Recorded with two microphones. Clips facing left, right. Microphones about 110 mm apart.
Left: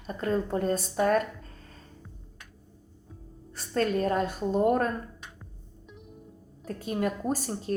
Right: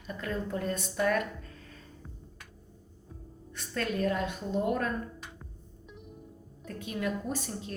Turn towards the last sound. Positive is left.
turn(degrees=40)  # may be behind; listen again after turning